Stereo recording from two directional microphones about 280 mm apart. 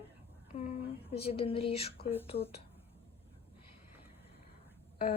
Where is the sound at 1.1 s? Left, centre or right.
Left.